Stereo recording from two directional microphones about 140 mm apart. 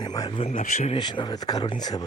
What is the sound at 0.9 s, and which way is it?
Speech, 35° left (ahead or behind).